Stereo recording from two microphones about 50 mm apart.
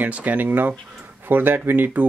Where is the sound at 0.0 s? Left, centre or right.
Right.